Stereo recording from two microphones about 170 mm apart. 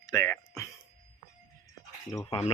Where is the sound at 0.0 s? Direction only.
20° left (ahead or behind).